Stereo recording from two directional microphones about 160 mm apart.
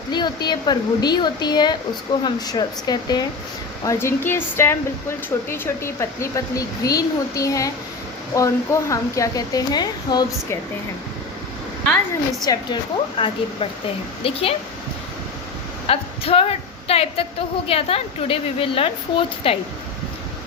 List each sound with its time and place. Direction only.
0.1 s speech: 25° left (ahead or behind)
12.5 s speech: 30° left (ahead or behind)
15.9 s a woman's voice: 35° left (ahead or behind)